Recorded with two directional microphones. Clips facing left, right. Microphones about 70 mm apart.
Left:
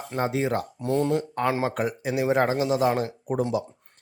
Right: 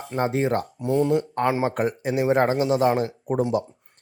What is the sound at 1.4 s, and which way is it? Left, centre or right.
Speech, right.